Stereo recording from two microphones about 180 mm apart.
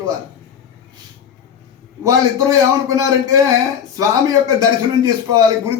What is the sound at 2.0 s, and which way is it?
A man's voice, 20° right (ahead or behind).